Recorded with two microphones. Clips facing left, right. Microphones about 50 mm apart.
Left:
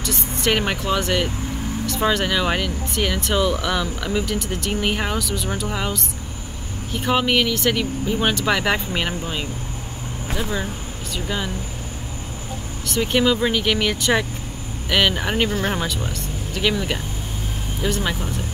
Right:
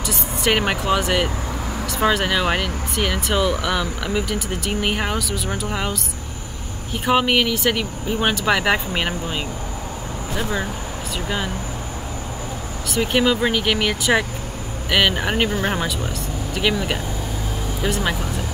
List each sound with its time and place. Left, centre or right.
0.0 s speech: centre
12.8 s speech: centre